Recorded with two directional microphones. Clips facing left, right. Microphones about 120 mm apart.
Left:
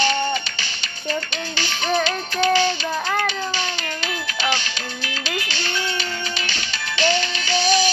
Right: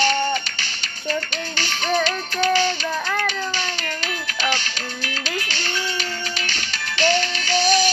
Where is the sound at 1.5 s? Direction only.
45° right (ahead or behind).